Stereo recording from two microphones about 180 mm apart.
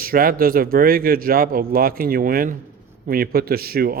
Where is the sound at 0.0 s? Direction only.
55° right (ahead or behind).